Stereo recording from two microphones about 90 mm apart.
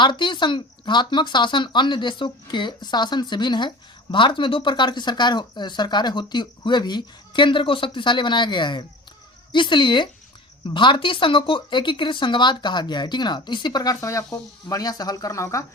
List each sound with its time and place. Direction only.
0.0 s speech: 60° left (ahead or behind); by 15.6 s 35° left (ahead or behind)